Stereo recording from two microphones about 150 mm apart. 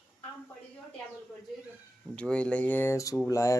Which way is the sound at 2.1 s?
5° left (ahead or behind).